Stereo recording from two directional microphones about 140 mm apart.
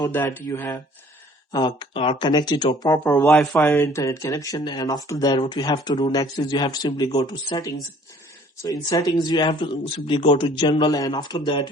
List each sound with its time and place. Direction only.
0.1 s speech: 15° left (ahead or behind)
1.5 s speech: 35° left (ahead or behind)
3.0 s speech: 10° left (ahead or behind); by 11.7 s 30° left (ahead or behind)